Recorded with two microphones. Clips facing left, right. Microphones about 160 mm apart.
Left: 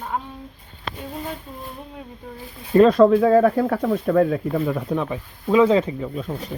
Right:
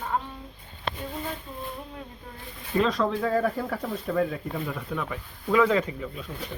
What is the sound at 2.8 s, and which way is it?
Speech, 55° left (ahead or behind).